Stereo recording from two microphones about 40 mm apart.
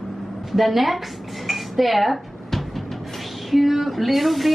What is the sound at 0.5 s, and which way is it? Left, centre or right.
Speech, centre.